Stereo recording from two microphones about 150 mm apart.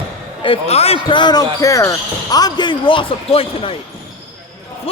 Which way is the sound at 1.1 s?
30° left (ahead or behind).